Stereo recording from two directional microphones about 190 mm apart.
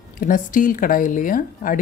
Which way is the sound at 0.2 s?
45° left (ahead or behind).